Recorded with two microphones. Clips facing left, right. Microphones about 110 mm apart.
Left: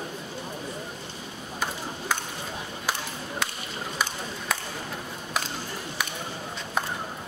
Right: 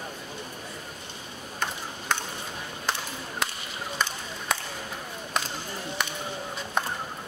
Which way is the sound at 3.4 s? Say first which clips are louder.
Even; centre (ahead or behind).